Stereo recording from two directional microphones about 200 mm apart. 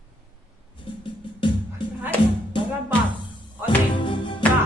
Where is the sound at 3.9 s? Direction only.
25° left (ahead or behind).